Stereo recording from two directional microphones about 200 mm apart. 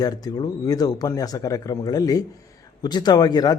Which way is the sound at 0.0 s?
20° left (ahead or behind).